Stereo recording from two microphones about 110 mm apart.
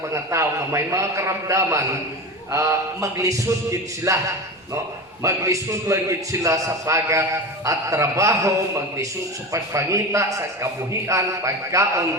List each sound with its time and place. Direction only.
0.1 s a man's voice: 25° right (ahead or behind)
5.2 s a man's voice: 30° right (ahead or behind)